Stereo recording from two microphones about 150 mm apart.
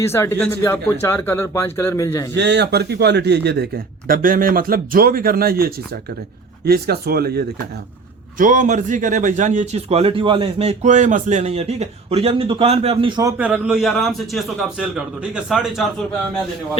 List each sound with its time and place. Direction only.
0.0 s speech: 15° left (ahead or behind)
2.6 s a man's voice: 90° right
8.4 s a man's voice: 60° right (ahead or behind); by 13.2 s 35° right (ahead or behind)
13.2 s a man's voice: 10° right (ahead or behind)